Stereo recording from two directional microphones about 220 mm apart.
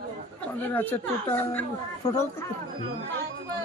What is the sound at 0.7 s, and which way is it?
Speech, 10° left (ahead or behind).